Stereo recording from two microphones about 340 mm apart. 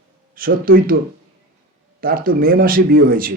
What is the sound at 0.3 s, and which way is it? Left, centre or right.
Speech, right.